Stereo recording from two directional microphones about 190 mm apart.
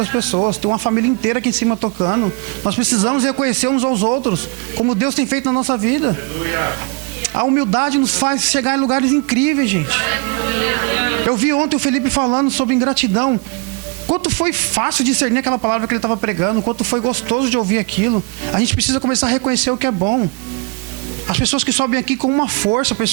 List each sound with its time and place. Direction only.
0.0 s a man's voice: 15° right (ahead or behind)
18.1 s speech: 30° right (ahead or behind)
18.6 s a man's voice: 15° right (ahead or behind)
21.2 s a man's voice: 15° right (ahead or behind)